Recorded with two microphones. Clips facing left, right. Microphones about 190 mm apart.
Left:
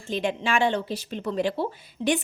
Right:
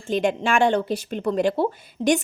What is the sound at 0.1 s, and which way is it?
A woman's voice, 50° right (ahead or behind).